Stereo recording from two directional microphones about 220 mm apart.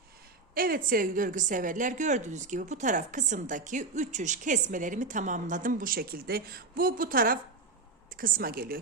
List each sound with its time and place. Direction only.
0.5 s a woman's voice: 40° right (ahead or behind)